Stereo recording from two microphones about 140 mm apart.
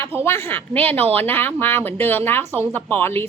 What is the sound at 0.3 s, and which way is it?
Speech, 15° left (ahead or behind).